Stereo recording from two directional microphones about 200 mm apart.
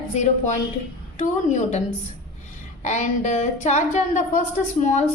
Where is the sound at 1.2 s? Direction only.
35° left (ahead or behind).